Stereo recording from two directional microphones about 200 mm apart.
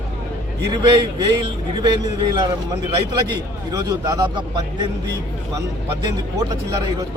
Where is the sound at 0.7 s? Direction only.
20° right (ahead or behind).